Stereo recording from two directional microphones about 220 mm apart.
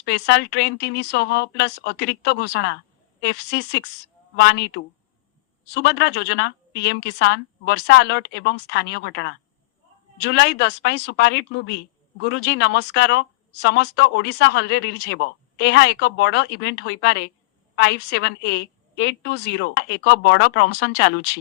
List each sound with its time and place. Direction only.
0.0 s speech: 50° left (ahead or behind)